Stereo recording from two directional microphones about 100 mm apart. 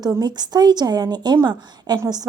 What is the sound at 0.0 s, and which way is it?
A woman's voice, 40° right (ahead or behind).